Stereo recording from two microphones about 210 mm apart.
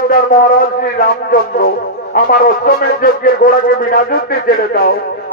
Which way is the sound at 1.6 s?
45° left (ahead or behind).